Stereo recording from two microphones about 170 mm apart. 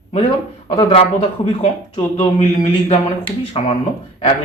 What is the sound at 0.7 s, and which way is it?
Speech, 35° left (ahead or behind).